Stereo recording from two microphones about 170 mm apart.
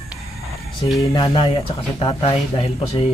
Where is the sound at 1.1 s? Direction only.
25° left (ahead or behind).